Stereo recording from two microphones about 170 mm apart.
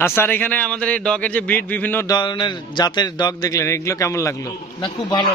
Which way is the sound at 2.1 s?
25° left (ahead or behind).